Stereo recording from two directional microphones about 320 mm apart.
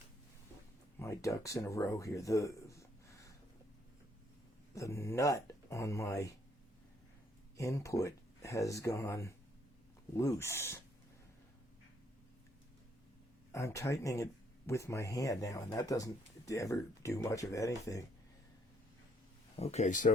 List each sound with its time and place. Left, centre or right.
0.9 s speech: centre
4.7 s speech: centre
7.5 s speech: centre
13.5 s speech: centre
19.5 s speech: left